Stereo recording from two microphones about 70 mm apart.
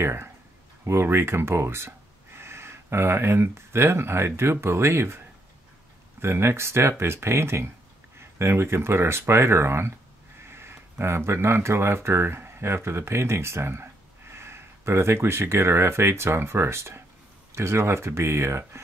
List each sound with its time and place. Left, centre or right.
0.0 s speech: right
6.2 s speech: right